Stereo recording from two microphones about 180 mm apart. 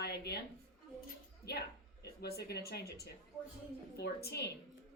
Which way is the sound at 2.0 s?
60° left (ahead or behind).